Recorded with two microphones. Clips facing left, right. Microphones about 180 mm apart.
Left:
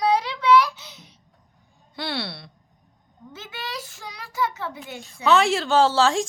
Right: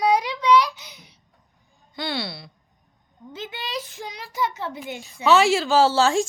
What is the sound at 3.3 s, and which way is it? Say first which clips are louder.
A child's voice: right 3 dB; 20° right (ahead or behind).